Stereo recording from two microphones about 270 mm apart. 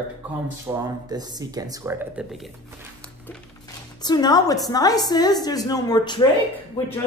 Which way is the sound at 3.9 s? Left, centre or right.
Centre.